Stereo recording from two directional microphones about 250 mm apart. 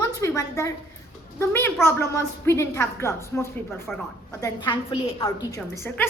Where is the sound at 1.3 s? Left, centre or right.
Centre.